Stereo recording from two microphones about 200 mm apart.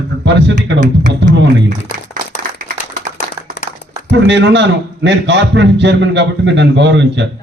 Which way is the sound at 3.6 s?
60° left (ahead or behind).